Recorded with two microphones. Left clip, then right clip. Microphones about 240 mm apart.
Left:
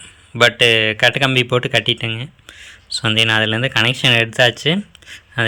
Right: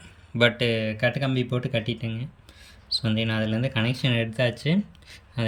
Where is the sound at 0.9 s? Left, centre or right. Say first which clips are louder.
Left 11 dB; left.